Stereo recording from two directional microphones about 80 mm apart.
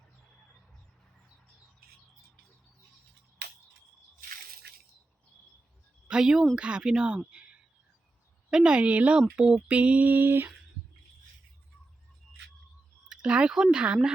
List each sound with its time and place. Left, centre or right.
6.1 s speech: centre
7.3 s a sound: centre
8.4 s speech: centre; by 10.5 s right
13.1 s speech: centre